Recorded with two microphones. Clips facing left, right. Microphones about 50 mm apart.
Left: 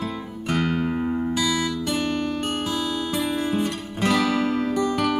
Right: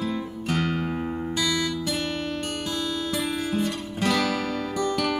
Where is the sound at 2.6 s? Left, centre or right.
Centre.